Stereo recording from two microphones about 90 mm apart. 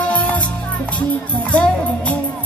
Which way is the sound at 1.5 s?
15° left (ahead or behind).